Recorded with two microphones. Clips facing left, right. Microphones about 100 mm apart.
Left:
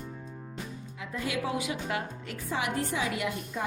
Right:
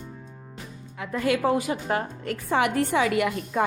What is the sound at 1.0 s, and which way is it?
A woman's voice, 60° right (ahead or behind).